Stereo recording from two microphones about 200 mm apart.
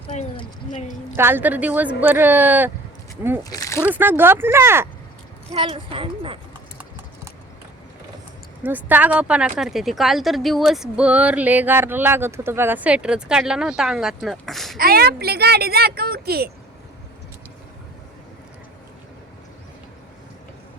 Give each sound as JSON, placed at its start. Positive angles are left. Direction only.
{"t": 0.1, "sound": "speech", "side_deg": 35}
{"t": 1.1, "sound": "speech", "side_deg": -10}
{"t": 3.5, "sound": "speech", "side_deg": 15}
{"t": 3.9, "sound": "speech", "side_deg": -10}
{"t": 5.5, "sound": "a woman's voice", "side_deg": -25}
{"t": 8.6, "sound": "speech", "side_deg": -10}
{"t": 14.8, "sound": "speech", "side_deg": -50}